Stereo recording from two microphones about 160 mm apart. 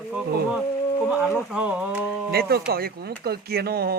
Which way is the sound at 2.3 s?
75° right (ahead or behind).